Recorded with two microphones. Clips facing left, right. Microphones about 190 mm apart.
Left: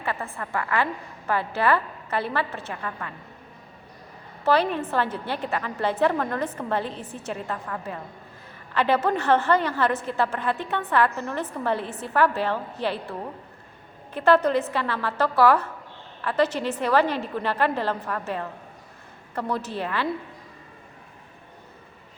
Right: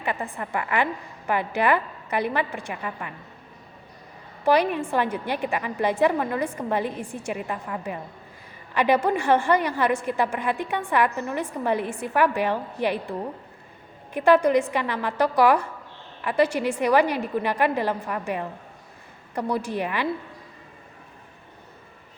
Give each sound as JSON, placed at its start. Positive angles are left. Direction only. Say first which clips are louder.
{"t": 0.0, "sound": "a woman's voice", "louder": "right 2 dB", "side_deg": -15}
{"t": 4.4, "sound": "a woman's voice", "louder": "right 1 dB", "side_deg": -15}